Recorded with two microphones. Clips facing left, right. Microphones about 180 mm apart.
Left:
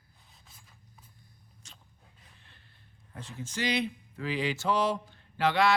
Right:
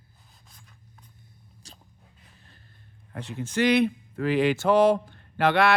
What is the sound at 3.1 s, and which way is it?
Speech, 65° right (ahead or behind).